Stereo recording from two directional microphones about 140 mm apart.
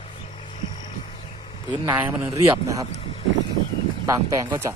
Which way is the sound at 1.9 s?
15° right (ahead or behind).